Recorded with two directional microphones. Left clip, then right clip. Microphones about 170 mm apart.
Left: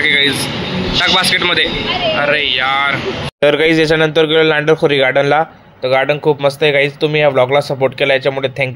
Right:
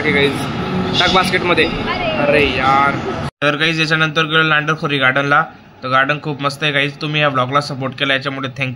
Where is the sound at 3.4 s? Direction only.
45° left (ahead or behind).